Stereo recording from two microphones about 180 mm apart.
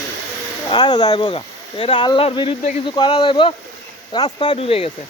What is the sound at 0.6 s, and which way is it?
Speech, 25° left (ahead or behind).